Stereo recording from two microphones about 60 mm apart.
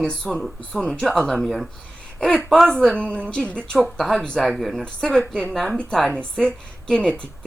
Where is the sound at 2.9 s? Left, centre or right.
Centre.